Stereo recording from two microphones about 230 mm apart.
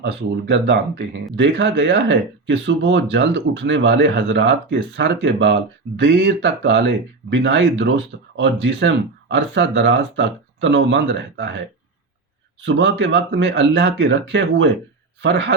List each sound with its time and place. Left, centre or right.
0.0 s speech: right
12.6 s speech: right